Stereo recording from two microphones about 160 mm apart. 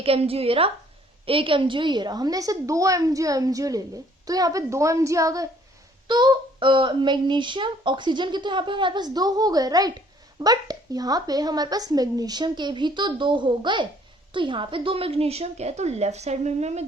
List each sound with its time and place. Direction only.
0.0 s a woman's voice: 35° right (ahead or behind)